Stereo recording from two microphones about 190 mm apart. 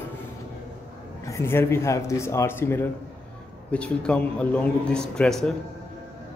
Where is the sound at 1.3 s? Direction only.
15° left (ahead or behind).